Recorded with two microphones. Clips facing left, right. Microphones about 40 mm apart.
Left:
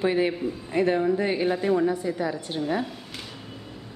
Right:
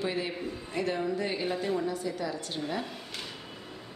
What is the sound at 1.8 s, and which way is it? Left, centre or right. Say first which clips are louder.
Speech: left 7 dB; left.